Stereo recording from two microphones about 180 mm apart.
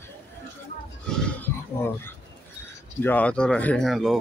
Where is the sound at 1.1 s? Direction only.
5° left (ahead or behind).